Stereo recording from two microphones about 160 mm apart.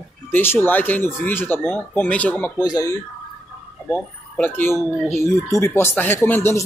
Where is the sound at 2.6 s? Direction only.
20° left (ahead or behind).